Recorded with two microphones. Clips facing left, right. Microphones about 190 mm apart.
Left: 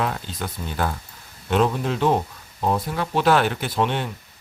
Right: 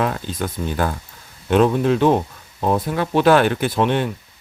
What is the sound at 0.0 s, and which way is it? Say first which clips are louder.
Speech: right 4 dB; 50° right (ahead or behind).